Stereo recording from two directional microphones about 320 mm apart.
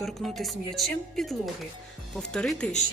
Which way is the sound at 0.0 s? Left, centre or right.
Centre.